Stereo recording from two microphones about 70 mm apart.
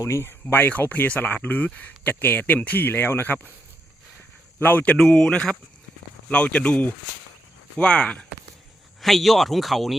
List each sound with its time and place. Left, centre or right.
0.0 s speech: left
0.4 s speech: left
4.6 s speech: left
4.9 s speech: centre
9.0 s speech: centre